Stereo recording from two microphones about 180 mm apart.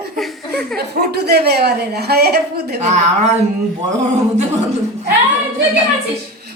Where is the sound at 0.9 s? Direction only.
60° right (ahead or behind).